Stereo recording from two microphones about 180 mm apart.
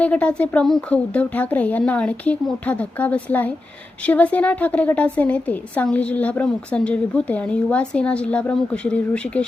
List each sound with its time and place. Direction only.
0.0 s a woman's voice: 5° left (ahead or behind)